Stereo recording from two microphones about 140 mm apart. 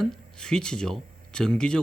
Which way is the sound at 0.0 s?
5° left (ahead or behind).